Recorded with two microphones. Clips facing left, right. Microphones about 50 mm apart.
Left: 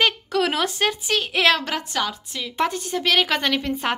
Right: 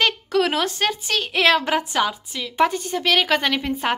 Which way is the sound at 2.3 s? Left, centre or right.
Centre.